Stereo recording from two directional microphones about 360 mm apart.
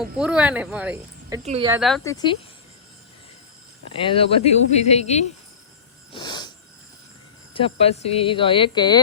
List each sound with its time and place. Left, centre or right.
0.0 s speech: centre
1.8 s speech: centre
3.8 s speech: centre
6.1 s snort: centre
7.5 s speech: centre